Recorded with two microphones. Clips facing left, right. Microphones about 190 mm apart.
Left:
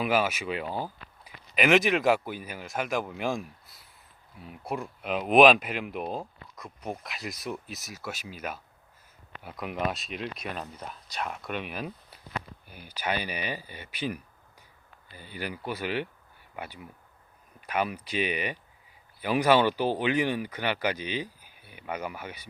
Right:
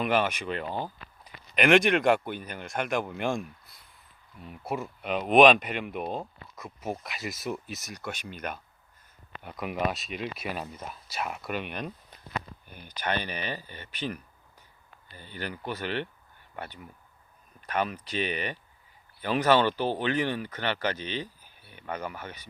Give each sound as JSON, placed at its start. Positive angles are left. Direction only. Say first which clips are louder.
{"t": 0.0, "sound": "speech", "louder": "even", "side_deg": 5}